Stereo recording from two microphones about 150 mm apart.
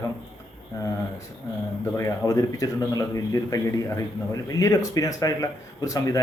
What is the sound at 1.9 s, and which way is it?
Speech, 20° left (ahead or behind).